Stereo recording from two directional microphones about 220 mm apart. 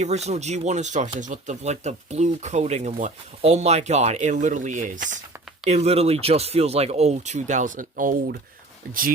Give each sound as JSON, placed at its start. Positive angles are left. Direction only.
{"t": 0.0, "sound": "speech", "side_deg": -30}